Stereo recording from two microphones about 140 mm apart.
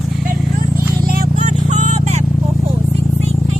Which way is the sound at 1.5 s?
60° right (ahead or behind).